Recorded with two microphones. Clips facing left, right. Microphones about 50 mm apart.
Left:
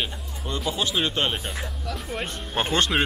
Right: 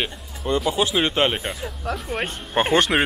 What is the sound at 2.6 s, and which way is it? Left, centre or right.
Speech, right.